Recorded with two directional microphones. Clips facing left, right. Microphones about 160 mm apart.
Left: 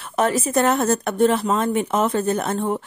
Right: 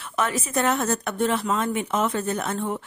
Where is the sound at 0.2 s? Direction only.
40° left (ahead or behind).